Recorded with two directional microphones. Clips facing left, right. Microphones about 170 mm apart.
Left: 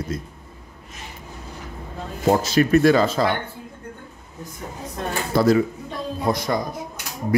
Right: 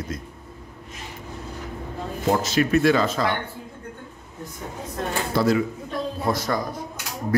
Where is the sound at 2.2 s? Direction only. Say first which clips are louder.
Left 3 dB; 40° left (ahead or behind).